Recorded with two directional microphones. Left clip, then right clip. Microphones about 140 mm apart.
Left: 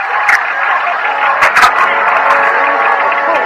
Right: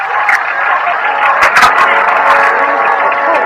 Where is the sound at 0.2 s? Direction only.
35° right (ahead or behind).